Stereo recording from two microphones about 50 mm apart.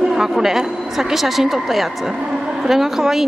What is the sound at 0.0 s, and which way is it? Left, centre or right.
A woman's voice, centre.